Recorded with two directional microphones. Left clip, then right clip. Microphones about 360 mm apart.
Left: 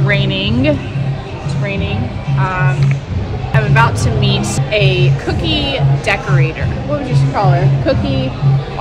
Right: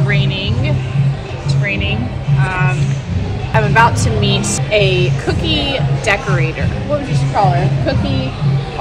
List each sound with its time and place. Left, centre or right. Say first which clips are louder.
0.1 s music: left 5 dB; centre
3.5 s a woman's voice: right 2 dB; centre